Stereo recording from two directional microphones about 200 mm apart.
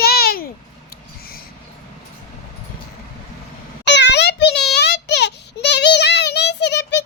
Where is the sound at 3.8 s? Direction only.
60° left (ahead or behind).